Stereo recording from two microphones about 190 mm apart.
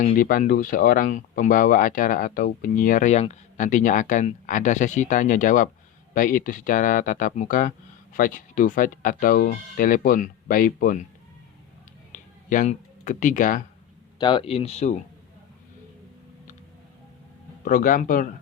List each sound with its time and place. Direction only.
0.0 s speech: 45° left (ahead or behind)
12.1 s a sound: 45° left (ahead or behind)
14.2 s speech: 25° left (ahead or behind)
17.7 s speech: 45° left (ahead or behind)